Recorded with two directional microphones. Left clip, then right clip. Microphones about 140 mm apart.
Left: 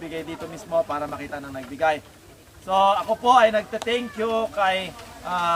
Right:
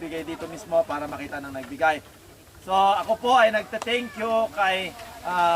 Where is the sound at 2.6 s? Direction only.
25° left (ahead or behind).